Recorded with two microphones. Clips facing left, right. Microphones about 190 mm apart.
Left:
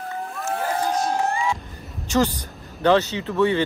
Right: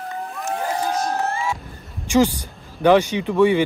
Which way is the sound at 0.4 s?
15° right (ahead or behind).